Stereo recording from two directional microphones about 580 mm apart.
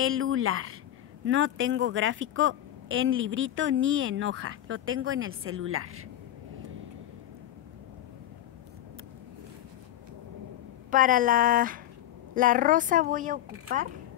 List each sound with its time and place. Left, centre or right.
0.0 s a woman's voice: right
10.9 s a woman's voice: centre